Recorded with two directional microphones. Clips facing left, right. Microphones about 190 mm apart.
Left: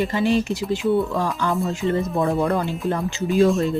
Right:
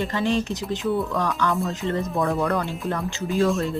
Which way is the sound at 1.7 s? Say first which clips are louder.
Left 3 dB; 15° left (ahead or behind).